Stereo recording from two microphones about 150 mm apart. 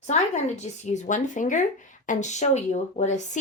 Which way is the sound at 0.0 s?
50° left (ahead or behind).